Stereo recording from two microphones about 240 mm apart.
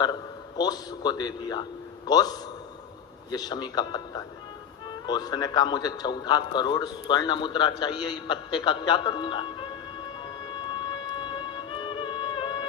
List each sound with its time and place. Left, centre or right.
0.0 s a man's voice: centre
10.9 s music: centre